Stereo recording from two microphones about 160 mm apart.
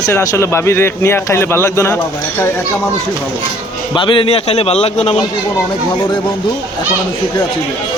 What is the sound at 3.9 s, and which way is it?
Speech, 30° left (ahead or behind).